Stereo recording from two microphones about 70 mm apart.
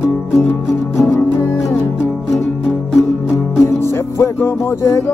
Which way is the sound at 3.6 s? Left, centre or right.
Left.